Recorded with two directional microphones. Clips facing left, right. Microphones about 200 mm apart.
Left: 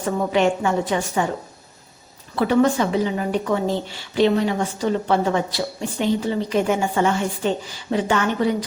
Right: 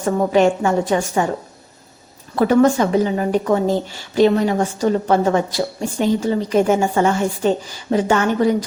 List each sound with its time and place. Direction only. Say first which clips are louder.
0.0 s a woman's voice: right 4 dB; 40° right (ahead or behind)
2.3 s a woman's voice: right 4 dB; 45° right (ahead or behind)